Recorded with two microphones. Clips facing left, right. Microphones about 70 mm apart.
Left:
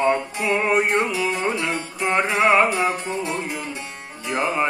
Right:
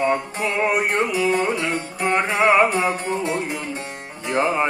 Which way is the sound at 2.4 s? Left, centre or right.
Centre.